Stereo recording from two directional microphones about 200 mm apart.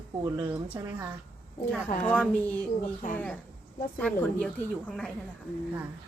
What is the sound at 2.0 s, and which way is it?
Speech, 5° left (ahead or behind).